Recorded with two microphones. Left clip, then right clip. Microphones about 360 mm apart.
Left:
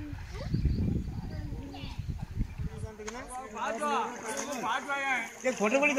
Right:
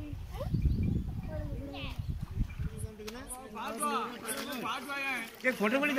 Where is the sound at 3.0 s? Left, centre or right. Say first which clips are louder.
Left 5 dB; centre.